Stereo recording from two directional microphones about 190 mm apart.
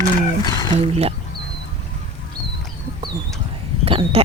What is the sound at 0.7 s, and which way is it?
Speech, 30° right (ahead or behind).